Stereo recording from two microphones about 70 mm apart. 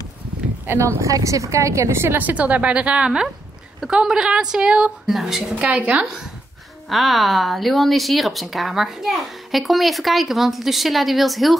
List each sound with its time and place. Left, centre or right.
0.7 s a woman's voice: right
2.2 s a woman's voice: right
5.0 s speech: centre
5.6 s a woman's voice: centre
6.9 s speech: centre